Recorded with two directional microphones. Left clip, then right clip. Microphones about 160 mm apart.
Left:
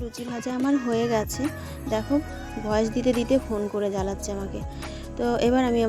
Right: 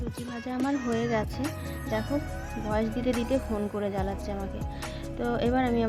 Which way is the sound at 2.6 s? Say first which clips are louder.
Left 5 dB; 30° left (ahead or behind).